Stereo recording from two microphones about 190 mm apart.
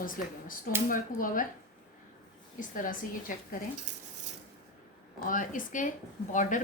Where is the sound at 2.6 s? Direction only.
45° left (ahead or behind).